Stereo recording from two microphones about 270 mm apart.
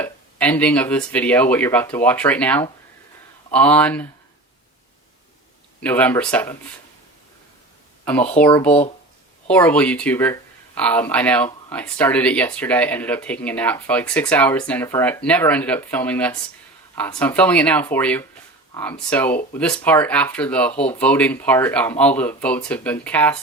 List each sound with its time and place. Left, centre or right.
0.0 s speech: centre
5.8 s speech: centre
8.0 s speech: centre